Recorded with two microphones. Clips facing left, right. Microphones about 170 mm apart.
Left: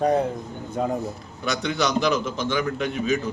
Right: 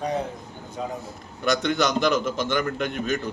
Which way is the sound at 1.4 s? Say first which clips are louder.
Right 2 dB; centre (ahead or behind).